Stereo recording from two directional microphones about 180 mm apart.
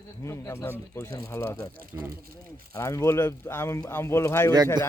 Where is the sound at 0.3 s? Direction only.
15° left (ahead or behind).